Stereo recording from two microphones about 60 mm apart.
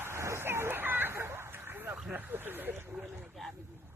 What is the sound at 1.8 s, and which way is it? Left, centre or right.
Vehicle, right.